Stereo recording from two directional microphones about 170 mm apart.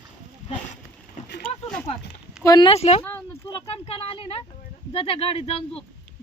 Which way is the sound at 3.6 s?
35° left (ahead or behind).